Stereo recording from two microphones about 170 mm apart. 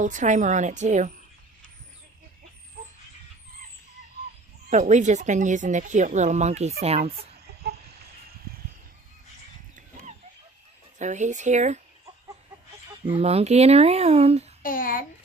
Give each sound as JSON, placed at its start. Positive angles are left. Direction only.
{"t": 0.0, "sound": "speech", "side_deg": -45}
{"t": 4.7, "sound": "speech", "side_deg": -45}
{"t": 7.4, "sound": "a sound", "side_deg": -70}
{"t": 9.7, "sound": "dog", "side_deg": -50}
{"t": 10.9, "sound": "speech", "side_deg": -45}
{"t": 13.1, "sound": "speech", "side_deg": -35}
{"t": 14.6, "sound": "a child's voice", "side_deg": 55}